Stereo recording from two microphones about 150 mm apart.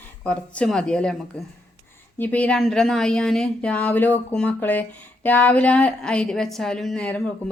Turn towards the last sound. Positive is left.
turn(degrees=10)  # may be behind; listen again after turning